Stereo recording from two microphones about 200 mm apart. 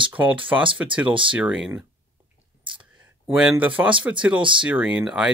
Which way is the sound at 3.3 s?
5° right (ahead or behind).